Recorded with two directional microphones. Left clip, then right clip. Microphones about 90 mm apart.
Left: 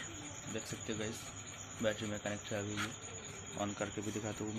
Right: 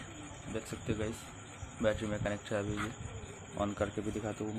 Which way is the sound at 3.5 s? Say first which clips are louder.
Right 5 dB; 45° right (ahead or behind).